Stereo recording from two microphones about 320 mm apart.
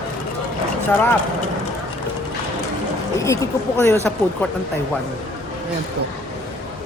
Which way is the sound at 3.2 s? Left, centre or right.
Centre.